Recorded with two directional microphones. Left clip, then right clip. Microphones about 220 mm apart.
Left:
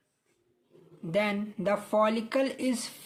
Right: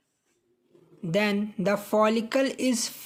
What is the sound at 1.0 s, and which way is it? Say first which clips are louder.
Speech: right 3 dB; 30° right (ahead or behind).